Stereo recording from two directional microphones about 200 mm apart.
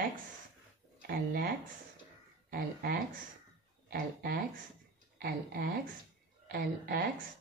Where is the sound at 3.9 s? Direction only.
50° right (ahead or behind).